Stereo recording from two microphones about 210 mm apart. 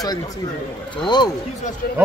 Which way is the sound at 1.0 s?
20° left (ahead or behind).